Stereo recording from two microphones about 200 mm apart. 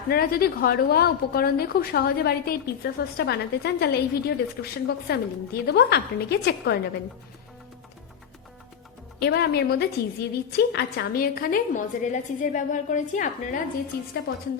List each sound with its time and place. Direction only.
0.1 s a woman's voice: 50° left (ahead or behind)
9.1 s a woman's voice: 55° left (ahead or behind)
14.3 s a woman's voice: 50° left (ahead or behind)